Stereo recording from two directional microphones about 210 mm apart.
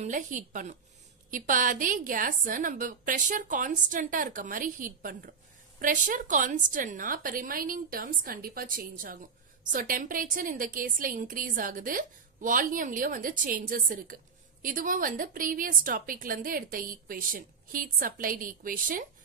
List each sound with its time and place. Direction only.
0.0 s a woman's voice: 35° right (ahead or behind)